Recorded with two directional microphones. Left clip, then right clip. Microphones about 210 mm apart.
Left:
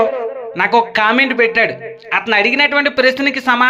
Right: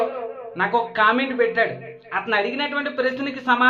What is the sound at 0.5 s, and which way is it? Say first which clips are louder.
Speech: left 8 dB; 25° left (ahead or behind).